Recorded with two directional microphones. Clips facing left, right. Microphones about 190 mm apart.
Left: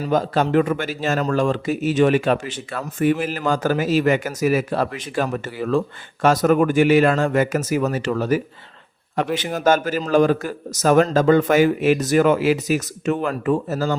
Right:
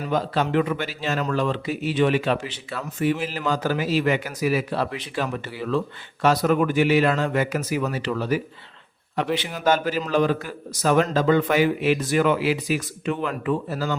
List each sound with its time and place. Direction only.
0.0 s speech: 45° left (ahead or behind)